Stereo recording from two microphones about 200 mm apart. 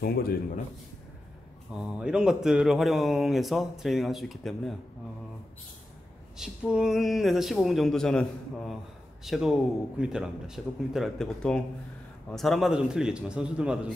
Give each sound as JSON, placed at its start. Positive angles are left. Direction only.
{"t": 0.0, "sound": "a man's voice", "side_deg": 50}
{"t": 1.7, "sound": "speech", "side_deg": -5}
{"t": 6.3, "sound": "speech", "side_deg": -5}